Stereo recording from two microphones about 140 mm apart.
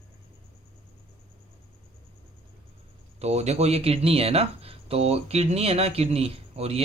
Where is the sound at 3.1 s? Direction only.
50° right (ahead or behind).